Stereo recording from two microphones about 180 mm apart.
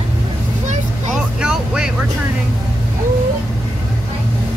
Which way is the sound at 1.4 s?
5° right (ahead or behind).